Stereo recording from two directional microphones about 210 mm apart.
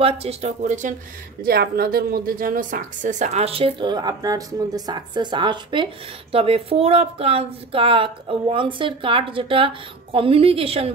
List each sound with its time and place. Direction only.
0.0 s speech: 30° right (ahead or behind)
1.4 s a woman's voice: 45° right (ahead or behind); by 10.9 s 25° right (ahead or behind)